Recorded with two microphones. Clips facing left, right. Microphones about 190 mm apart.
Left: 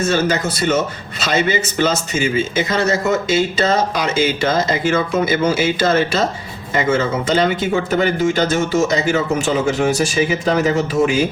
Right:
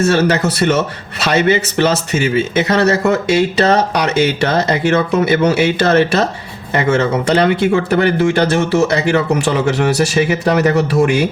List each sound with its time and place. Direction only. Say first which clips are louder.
0.0 s a man's voice: right 4 dB; 65° right (ahead or behind)